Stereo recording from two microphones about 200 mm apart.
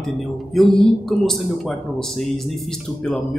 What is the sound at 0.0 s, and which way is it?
A man's voice, centre (ahead or behind).